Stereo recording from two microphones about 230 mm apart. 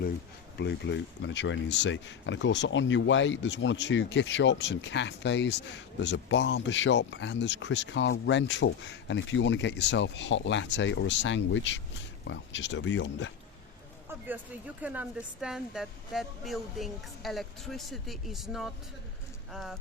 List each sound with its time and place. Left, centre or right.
0.5 s speech: left
14.1 s speech: centre